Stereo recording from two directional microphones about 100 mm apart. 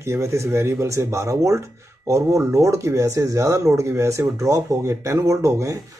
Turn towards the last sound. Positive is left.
turn(degrees=-35)  # may be behind; listen again after turning